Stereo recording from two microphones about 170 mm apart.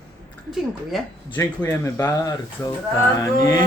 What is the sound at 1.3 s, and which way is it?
Speech, 15° left (ahead or behind).